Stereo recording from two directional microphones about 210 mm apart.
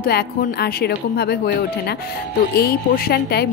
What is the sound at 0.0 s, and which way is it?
A woman's voice, 45° left (ahead or behind).